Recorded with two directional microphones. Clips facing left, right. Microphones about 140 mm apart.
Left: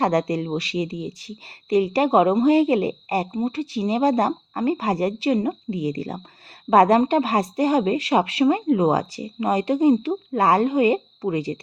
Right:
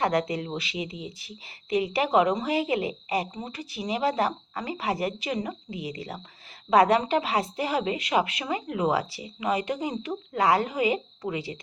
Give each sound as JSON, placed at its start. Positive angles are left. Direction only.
{"t": 0.0, "sound": "a woman's voice", "side_deg": 35}